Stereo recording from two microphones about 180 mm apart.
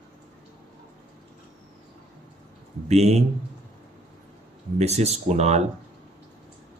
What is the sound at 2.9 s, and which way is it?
Speech, 35° right (ahead or behind).